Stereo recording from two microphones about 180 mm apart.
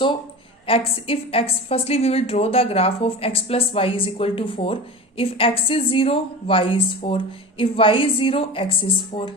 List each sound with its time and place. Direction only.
0.7 s a woman's voice: 35° left (ahead or behind)